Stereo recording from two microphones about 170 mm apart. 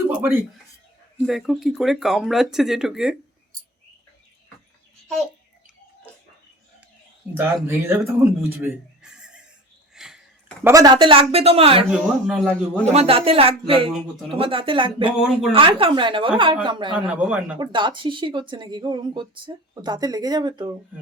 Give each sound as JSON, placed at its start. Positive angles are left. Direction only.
{"t": 0.1, "sound": "speech", "side_deg": -10}
{"t": 1.3, "sound": "speech", "side_deg": 0}
{"t": 7.3, "sound": "speech", "side_deg": -15}
{"t": 9.9, "sound": "sniff", "side_deg": -5}
{"t": 10.6, "sound": "speech", "side_deg": -20}
{"t": 11.9, "sound": "speech", "side_deg": -5}
{"t": 12.8, "sound": "speech", "side_deg": -40}
{"t": 15.2, "sound": "speech", "side_deg": -5}
{"t": 15.5, "sound": "speech", "side_deg": -30}
{"t": 17.1, "sound": "speech", "side_deg": -10}
{"t": 17.6, "sound": "speech", "side_deg": -30}